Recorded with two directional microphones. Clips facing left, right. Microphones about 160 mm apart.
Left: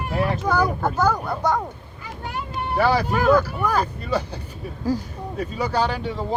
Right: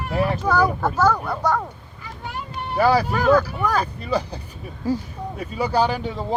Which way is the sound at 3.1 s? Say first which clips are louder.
Even; 5° left (ahead or behind).